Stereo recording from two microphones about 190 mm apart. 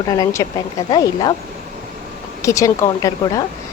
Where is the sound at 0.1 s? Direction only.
15° left (ahead or behind).